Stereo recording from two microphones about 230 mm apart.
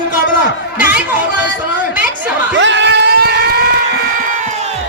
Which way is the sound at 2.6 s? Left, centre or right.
Right.